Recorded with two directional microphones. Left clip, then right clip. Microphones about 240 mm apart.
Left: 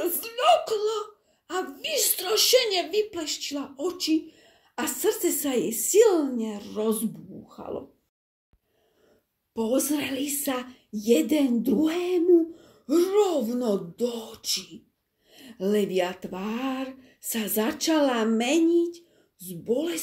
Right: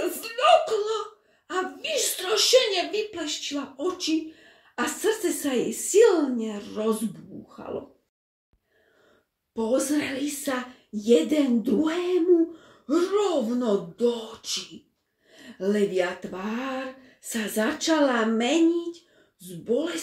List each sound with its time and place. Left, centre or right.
0.0 s whimper: left
1.5 s a sound: left
3.1 s speech: left
9.5 s speech: left